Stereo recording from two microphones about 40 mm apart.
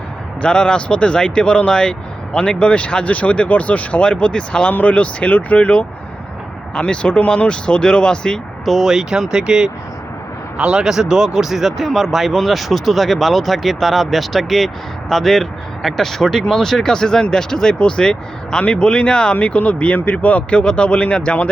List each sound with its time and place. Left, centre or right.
0.4 s speech: left
4.7 s speech: left
8.8 s speech: centre; by 21.5 s left